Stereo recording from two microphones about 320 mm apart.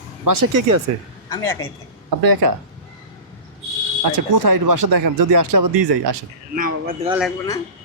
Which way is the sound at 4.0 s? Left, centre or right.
Right.